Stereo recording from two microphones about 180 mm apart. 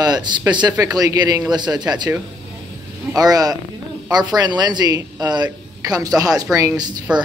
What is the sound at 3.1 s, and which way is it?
Speech, 20° right (ahead or behind).